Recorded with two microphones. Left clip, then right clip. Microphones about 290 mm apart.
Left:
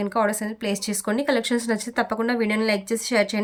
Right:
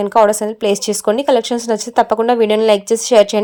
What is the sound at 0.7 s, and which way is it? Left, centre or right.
A woman's voice, centre.